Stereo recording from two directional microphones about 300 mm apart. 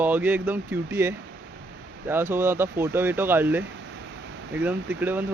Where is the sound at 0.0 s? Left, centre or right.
Centre.